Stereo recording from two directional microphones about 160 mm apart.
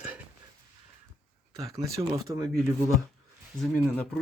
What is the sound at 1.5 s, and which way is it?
Speech, 20° right (ahead or behind).